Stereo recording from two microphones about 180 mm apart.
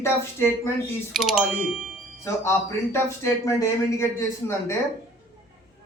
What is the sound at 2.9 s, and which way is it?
Speech, 15° left (ahead or behind).